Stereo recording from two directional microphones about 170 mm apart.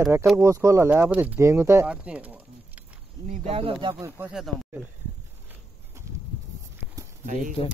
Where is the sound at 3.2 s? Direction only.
35° right (ahead or behind).